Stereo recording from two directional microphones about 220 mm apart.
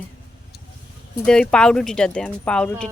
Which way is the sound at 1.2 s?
5° left (ahead or behind).